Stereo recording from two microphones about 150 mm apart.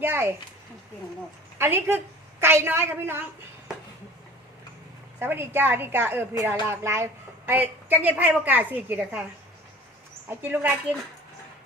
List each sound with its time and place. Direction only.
0.0 s a woman's voice: 15° right (ahead or behind)
1.5 s a woman's voice: 15° right (ahead or behind)
5.2 s a woman's voice: 15° right (ahead or behind)
10.2 s a woman's voice: 15° right (ahead or behind)